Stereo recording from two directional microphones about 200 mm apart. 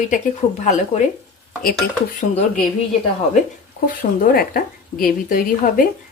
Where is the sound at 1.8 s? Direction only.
50° left (ahead or behind).